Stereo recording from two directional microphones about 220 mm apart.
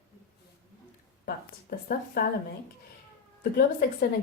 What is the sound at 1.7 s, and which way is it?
Speech, 40° left (ahead or behind).